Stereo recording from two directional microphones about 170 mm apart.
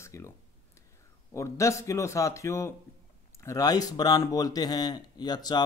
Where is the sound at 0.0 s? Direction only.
15° left (ahead or behind).